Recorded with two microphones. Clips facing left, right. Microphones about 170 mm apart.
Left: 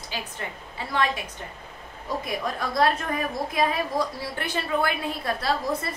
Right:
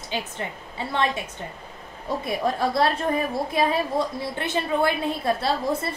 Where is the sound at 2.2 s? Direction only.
30° right (ahead or behind).